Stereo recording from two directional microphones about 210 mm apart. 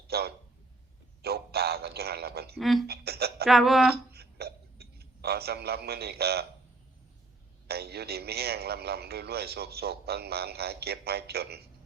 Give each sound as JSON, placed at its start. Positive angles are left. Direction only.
{"t": 0.1, "sound": "a man's voice", "side_deg": -50}
{"t": 2.6, "sound": "speech", "side_deg": 0}
{"t": 2.8, "sound": "a man's voice", "side_deg": -50}
{"t": 3.4, "sound": "speech", "side_deg": 0}
{"t": 3.9, "sound": "a sound", "side_deg": -50}
{"t": 7.7, "sound": "a man's voice", "side_deg": -50}